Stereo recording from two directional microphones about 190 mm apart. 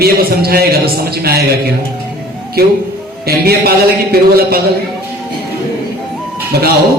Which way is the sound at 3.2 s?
55° right (ahead or behind).